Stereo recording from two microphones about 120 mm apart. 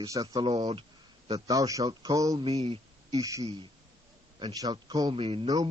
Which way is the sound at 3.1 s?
30° right (ahead or behind).